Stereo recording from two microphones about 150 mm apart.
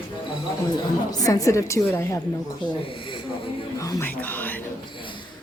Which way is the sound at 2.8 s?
35° left (ahead or behind).